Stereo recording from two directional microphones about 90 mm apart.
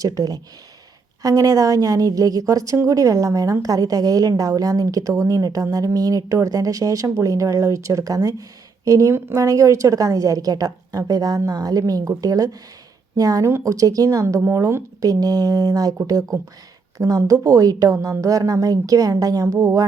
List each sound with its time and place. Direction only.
0.0 s speech: 40° right (ahead or behind)
15.0 s speech: 45° right (ahead or behind)